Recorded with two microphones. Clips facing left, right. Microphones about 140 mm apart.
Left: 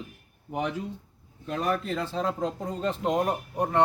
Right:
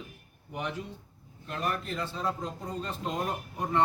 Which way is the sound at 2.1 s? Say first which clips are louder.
Left 5 dB; 90° left.